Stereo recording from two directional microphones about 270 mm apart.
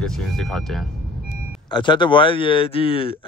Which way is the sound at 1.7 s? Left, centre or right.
Centre.